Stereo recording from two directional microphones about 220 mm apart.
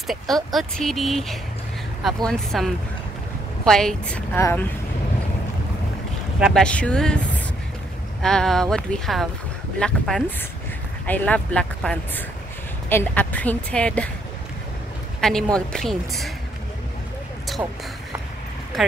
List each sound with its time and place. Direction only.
0.0 s speech: centre (ahead or behind)
6.4 s speech: 5° left (ahead or behind)
8.2 s a woman's voice: centre (ahead or behind)
15.1 s speech: centre (ahead or behind)
18.7 s speech: centre (ahead or behind)